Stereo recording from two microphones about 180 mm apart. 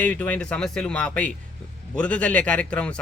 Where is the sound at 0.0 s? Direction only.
5° left (ahead or behind).